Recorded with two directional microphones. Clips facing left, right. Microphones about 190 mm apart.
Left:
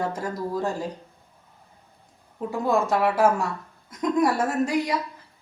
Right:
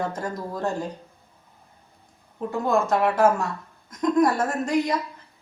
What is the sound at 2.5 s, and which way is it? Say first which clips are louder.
Speech: right 1 dB; 10° left (ahead or behind).